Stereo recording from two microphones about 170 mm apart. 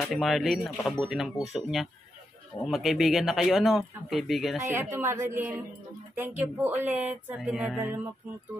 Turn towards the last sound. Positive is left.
turn(degrees=-10)  # may be behind; listen again after turning